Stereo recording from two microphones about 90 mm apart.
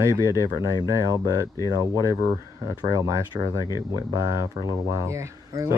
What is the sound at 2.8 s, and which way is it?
Speech, 40° right (ahead or behind).